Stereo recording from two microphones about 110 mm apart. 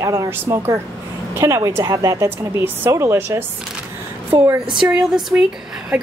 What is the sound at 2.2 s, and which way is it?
A woman's voice, 20° right (ahead or behind).